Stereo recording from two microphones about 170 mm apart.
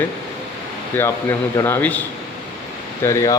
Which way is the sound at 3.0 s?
20° left (ahead or behind).